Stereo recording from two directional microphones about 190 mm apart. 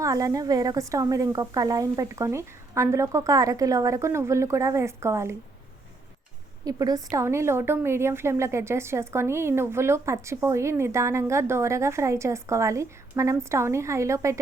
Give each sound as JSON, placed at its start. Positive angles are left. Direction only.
{"t": 0.0, "sound": "a woman's voice", "side_deg": -15}
{"t": 6.7, "sound": "a woman's voice", "side_deg": -20}